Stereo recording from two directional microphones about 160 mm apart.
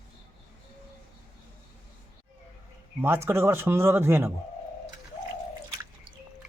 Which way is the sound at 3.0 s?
15° right (ahead or behind).